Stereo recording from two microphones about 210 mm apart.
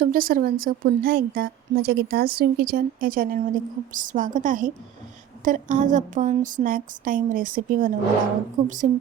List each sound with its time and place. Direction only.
0.0 s a woman's voice: 40° right (ahead or behind)